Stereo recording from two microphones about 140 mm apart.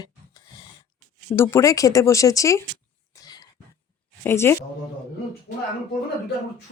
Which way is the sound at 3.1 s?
25° left (ahead or behind).